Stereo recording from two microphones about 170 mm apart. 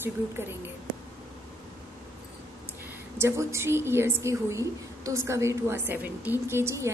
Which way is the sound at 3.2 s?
15° right (ahead or behind).